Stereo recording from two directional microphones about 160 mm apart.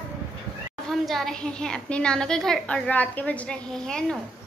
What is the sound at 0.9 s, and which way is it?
A woman's voice, centre (ahead or behind).